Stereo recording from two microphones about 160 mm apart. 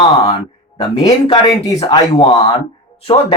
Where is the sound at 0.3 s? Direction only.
35° left (ahead or behind).